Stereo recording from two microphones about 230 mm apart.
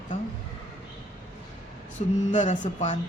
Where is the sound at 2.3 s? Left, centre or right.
Left.